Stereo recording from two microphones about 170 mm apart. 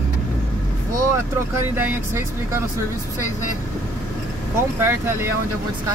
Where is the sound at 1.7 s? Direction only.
15° right (ahead or behind).